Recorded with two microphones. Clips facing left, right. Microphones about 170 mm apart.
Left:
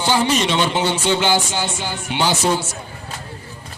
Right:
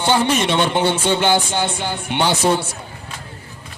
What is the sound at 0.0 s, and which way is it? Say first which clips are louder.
Speech: right 1 dB; 55° right (ahead or behind).